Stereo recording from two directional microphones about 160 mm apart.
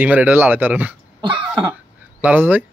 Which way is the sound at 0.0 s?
10° right (ahead or behind).